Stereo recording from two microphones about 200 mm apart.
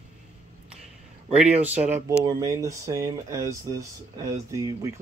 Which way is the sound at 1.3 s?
5° right (ahead or behind).